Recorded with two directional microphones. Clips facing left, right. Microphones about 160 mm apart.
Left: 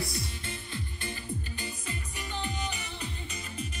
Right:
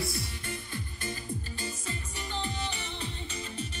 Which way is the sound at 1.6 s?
35° right (ahead or behind).